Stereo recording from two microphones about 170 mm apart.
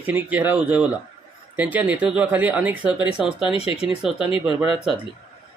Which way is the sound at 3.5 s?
35° left (ahead or behind).